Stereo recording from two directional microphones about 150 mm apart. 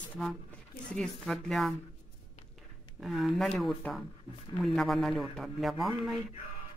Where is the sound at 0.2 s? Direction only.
5° left (ahead or behind).